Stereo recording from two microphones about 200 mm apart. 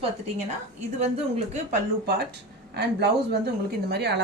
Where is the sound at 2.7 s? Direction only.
55° right (ahead or behind).